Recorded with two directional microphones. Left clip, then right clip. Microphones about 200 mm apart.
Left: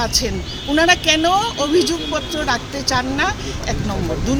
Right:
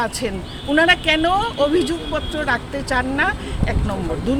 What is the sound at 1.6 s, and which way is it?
Speech, 20° right (ahead or behind).